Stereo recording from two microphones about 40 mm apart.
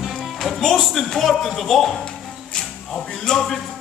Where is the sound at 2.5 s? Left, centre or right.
Centre.